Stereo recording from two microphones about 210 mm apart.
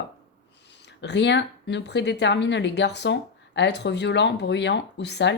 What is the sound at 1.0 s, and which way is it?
A woman's voice, 55° left (ahead or behind).